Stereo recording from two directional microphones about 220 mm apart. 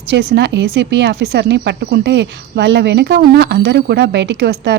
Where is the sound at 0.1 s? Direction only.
50° right (ahead or behind).